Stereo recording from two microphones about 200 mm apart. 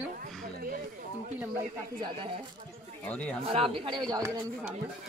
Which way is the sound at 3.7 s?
25° right (ahead or behind).